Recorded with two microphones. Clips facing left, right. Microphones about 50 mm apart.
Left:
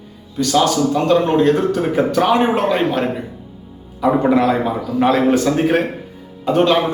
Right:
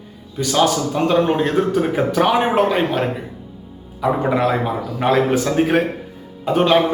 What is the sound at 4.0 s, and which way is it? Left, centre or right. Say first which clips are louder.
A man's voice: left 3 dB; centre.